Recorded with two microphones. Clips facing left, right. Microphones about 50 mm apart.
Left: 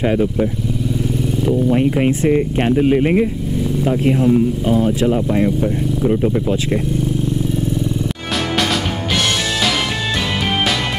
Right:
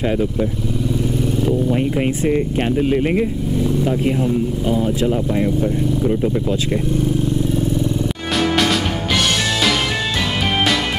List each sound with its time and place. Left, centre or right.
0.0 s speech: left
1.7 s speech: left
4.6 s speech: left
5.0 s speech: left